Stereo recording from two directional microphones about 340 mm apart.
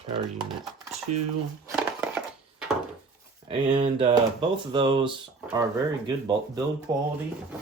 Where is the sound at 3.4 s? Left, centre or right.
Centre.